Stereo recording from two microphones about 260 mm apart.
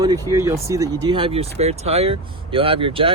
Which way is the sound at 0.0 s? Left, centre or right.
Centre.